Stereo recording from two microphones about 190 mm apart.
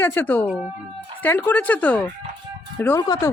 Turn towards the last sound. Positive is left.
turn(degrees=20)  # may be behind; listen again after turning